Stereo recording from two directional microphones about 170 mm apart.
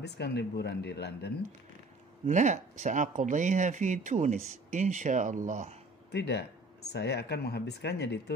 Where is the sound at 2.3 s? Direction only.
45° right (ahead or behind).